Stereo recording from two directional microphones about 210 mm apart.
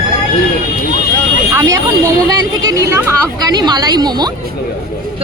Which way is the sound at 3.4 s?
20° right (ahead or behind).